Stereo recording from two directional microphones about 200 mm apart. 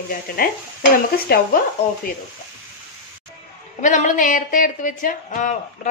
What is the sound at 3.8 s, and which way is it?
Speech, 40° left (ahead or behind).